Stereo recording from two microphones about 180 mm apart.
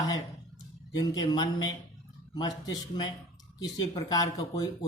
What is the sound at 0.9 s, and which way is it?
Speech, 25° left (ahead or behind).